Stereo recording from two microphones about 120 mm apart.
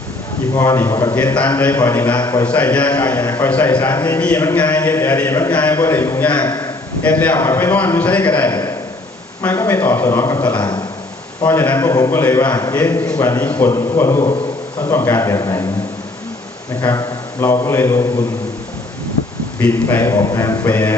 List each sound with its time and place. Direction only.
0.5 s a man's voice: 30° left (ahead or behind)
1.1 s a man's voice: 15° left (ahead or behind)
2.4 s a man's voice: 10° left (ahead or behind)
10.6 s speech: 35° left (ahead or behind)
11.4 s a man's voice: 15° left (ahead or behind)
11.8 s a man's voice: 30° left (ahead or behind)
16.8 s a man's voice: 25° left (ahead or behind)
19.5 s a man's voice: 15° left (ahead or behind)
20.0 s a man's voice: 25° left (ahead or behind)